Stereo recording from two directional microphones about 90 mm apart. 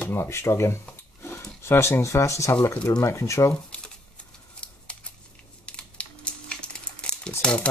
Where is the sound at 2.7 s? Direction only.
15° left (ahead or behind).